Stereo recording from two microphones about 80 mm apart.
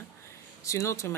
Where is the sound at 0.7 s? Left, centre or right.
Left.